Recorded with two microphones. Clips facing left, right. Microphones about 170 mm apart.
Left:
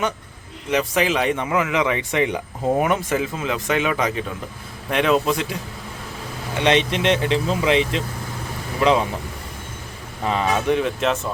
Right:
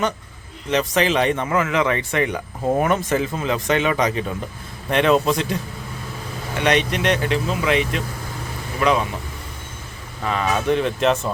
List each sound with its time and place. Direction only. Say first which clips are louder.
0.7 s a man's voice: right 1 dB; 10° left (ahead or behind)
6.6 s speech: left 1 dB; 25° left (ahead or behind)
10.7 s a man's voice: right 5 dB; 5° left (ahead or behind)